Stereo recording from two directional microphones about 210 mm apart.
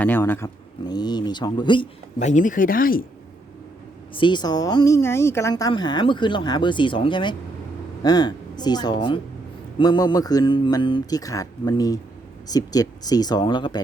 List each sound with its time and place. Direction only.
0.0 s speech: 10° left (ahead or behind)
2.1 s speech: 35° left (ahead or behind)
4.1 s speech: 20° left (ahead or behind)